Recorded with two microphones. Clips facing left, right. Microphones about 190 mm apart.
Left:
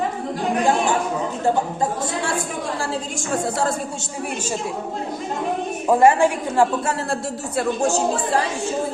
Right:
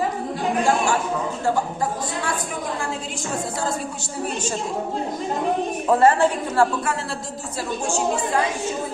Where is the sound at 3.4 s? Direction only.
70° left (ahead or behind).